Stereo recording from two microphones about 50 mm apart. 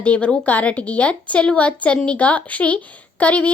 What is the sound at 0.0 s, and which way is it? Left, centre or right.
A woman's voice, left.